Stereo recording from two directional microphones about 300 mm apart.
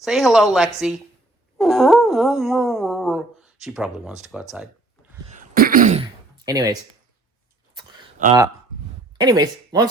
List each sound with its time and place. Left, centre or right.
0.0 s speech: centre
5.3 s throat clearing: right; by 6.7 s centre
8.2 s speech: right
9.2 s speech: centre